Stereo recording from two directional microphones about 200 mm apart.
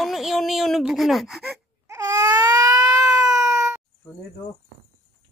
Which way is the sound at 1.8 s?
15° right (ahead or behind).